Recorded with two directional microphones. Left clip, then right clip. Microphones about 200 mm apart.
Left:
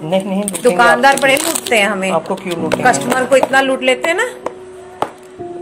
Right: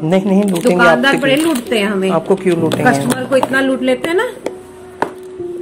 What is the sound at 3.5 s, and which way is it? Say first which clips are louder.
Speech: left 2 dB; 40° left (ahead or behind).